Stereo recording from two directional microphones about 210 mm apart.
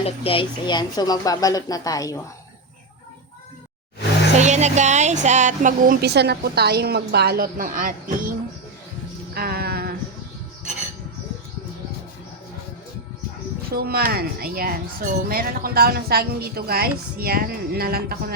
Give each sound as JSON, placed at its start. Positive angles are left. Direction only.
{"t": 0.0, "sound": "speech", "side_deg": 25}
{"t": 4.4, "sound": "speech", "side_deg": -35}
{"t": 9.3, "sound": "a sound", "side_deg": -45}
{"t": 13.7, "sound": "speech", "side_deg": -45}